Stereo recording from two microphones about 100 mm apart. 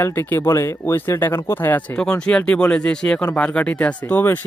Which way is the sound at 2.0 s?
10° left (ahead or behind).